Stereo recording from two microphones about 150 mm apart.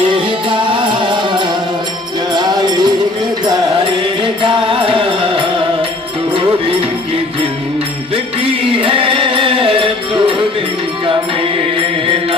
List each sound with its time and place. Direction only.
0.1 s music: 35° right (ahead or behind)
4.2 s music: 35° right (ahead or behind)
8.6 s music: 35° right (ahead or behind)